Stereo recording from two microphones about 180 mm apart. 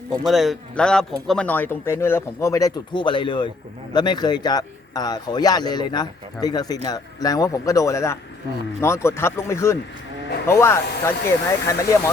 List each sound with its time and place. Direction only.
0.1 s speech: centre (ahead or behind); by 11.8 s 15° left (ahead or behind)